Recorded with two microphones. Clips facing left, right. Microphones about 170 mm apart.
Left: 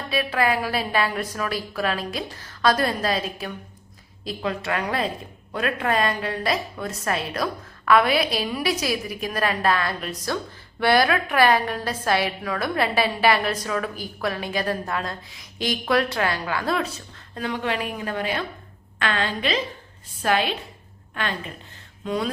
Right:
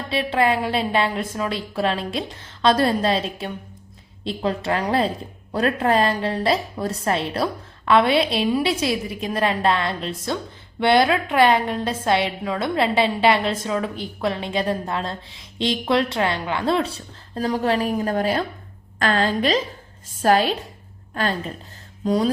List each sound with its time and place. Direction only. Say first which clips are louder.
0.1 s a woman's voice: right 3 dB; 25° right (ahead or behind)